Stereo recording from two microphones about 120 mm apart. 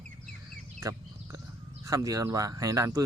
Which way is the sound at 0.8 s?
25° right (ahead or behind).